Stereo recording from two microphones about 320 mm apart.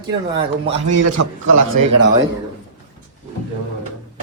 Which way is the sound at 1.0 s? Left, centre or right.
Right.